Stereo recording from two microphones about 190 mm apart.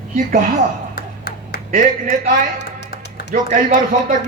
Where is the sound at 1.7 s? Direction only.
40° right (ahead or behind).